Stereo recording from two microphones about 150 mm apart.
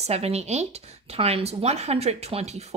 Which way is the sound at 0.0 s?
45° right (ahead or behind).